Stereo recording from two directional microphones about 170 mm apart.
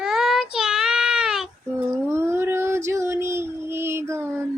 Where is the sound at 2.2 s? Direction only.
15° right (ahead or behind).